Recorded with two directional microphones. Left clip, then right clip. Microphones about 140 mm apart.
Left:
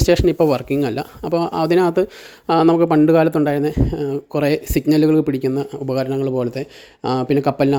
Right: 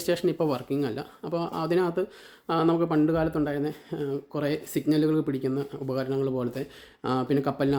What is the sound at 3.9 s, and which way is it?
Speech, 45° left (ahead or behind).